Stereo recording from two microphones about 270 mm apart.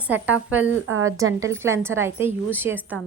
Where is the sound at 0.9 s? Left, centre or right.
Right.